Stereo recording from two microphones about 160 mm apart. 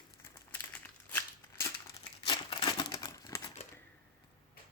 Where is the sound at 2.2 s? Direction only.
30° left (ahead or behind).